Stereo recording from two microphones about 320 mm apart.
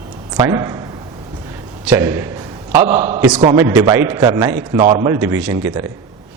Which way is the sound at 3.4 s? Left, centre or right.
Centre.